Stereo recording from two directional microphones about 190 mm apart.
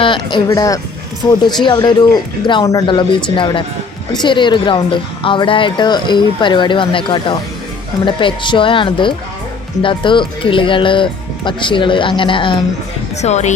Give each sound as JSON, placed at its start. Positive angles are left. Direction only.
{"t": 0.0, "sound": "a woman's voice", "side_deg": 25}
{"t": 13.2, "sound": "speech", "side_deg": 35}